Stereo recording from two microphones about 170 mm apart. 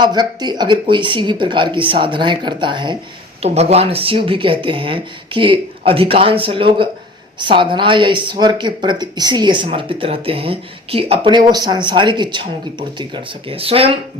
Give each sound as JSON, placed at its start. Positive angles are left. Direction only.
{"t": 0.0, "sound": "speech", "side_deg": -25}
{"t": 3.4, "sound": "speech", "side_deg": -40}